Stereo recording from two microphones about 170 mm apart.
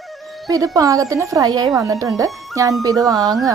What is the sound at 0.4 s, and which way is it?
Speech, 20° right (ahead or behind).